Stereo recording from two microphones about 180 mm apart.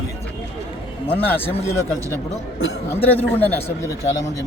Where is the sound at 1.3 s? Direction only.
10° left (ahead or behind).